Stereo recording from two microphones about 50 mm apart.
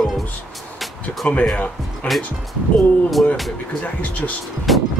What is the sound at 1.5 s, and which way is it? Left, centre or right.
Speech, left.